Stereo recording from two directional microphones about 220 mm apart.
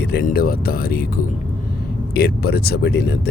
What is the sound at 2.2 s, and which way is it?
Speech, 45° left (ahead or behind).